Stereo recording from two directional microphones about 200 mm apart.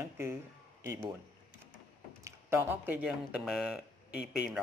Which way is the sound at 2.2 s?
10° right (ahead or behind).